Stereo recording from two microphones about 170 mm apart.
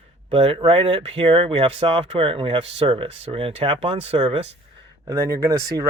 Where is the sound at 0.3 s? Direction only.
30° right (ahead or behind).